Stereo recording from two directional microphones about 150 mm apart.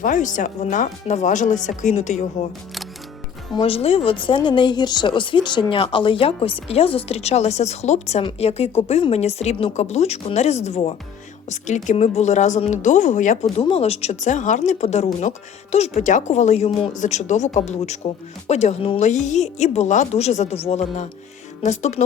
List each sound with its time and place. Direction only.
0.0 s speech: 60° left (ahead or behind)
3.5 s speech: 35° left (ahead or behind)